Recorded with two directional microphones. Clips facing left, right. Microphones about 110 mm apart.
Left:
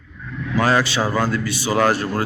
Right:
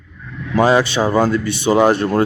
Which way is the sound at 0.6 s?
20° right (ahead or behind).